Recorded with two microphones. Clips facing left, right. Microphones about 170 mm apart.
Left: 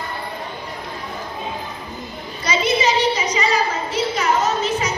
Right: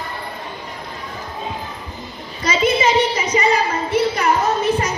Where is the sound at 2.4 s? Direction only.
50° right (ahead or behind).